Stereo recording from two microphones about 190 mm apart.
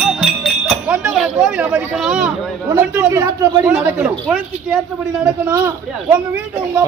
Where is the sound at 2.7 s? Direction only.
15° right (ahead or behind).